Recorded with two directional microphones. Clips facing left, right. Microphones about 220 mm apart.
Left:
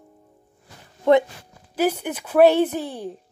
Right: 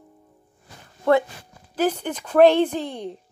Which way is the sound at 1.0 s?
20° left (ahead or behind).